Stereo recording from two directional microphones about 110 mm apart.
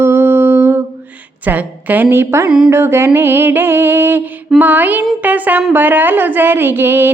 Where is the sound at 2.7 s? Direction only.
20° right (ahead or behind).